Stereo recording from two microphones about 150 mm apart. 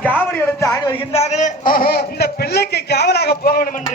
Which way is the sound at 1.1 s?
50° left (ahead or behind).